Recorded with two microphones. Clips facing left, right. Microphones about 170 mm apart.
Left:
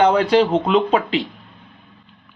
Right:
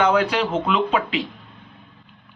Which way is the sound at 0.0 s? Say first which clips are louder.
Left 5 dB; 35° left (ahead or behind).